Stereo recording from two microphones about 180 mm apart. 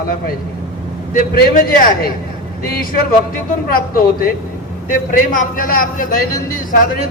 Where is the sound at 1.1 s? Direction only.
55° left (ahead or behind).